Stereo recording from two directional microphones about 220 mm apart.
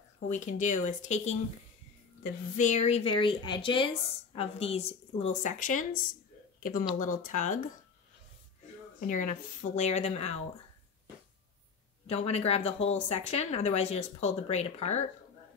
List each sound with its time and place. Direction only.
0.3 s a woman's voice: 35° left (ahead or behind)
9.0 s a woman's voice: 35° left (ahead or behind)
12.1 s speech: 30° left (ahead or behind)